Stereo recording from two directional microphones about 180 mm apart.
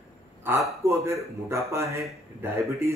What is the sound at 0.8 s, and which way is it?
A man's voice, 15° right (ahead or behind).